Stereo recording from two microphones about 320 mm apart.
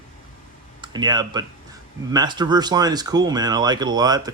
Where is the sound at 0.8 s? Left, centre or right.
Centre.